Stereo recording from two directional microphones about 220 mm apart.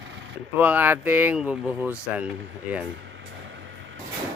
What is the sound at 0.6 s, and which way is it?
Speech, 10° right (ahead or behind).